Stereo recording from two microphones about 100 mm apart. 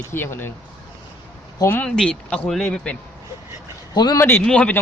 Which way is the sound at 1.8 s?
5° left (ahead or behind).